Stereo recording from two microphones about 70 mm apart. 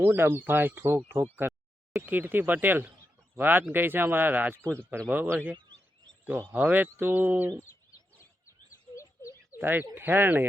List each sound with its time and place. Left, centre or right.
0.0 s speech: right
9.0 s a sound: left
9.6 s speech: right